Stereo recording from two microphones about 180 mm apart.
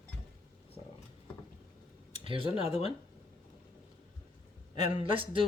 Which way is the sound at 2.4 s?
35° left (ahead or behind).